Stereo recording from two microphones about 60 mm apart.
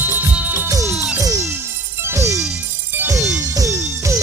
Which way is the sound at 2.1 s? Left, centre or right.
Right.